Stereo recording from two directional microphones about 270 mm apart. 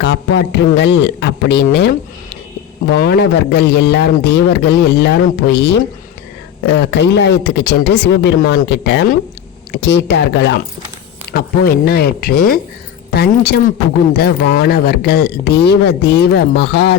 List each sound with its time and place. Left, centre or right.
0.0 s speech: left